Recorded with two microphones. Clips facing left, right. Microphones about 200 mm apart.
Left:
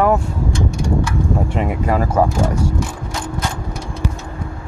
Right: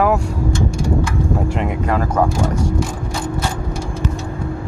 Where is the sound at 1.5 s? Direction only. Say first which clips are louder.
Left 1 dB; centre (ahead or behind).